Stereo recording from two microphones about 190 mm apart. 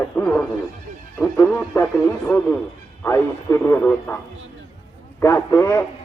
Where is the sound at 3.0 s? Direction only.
10° left (ahead or behind).